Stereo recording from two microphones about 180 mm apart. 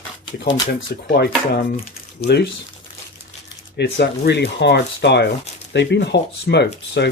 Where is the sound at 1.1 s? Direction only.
60° left (ahead or behind).